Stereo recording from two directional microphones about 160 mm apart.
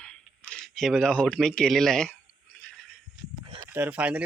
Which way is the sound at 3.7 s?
10° right (ahead or behind).